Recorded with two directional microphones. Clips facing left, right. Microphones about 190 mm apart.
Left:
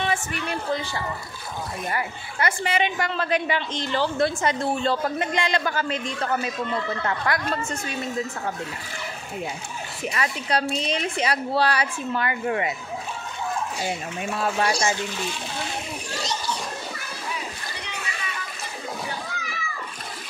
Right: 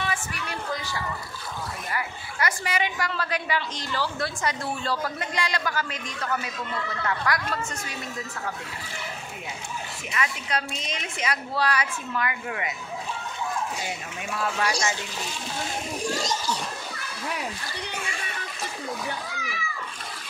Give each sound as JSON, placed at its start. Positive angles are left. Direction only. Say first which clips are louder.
{"t": 0.0, "sound": "a man's voice", "louder": "left 5 dB", "side_deg": 25}
{"t": 10.1, "sound": "a woman's voice", "louder": "left 3 dB", "side_deg": 35}
{"t": 14.4, "sound": "a man's voice", "louder": "left 3 dB", "side_deg": 30}